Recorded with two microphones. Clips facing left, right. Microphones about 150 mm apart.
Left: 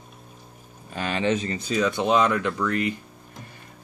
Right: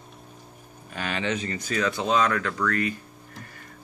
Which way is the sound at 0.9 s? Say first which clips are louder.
Left 4 dB; 35° left (ahead or behind).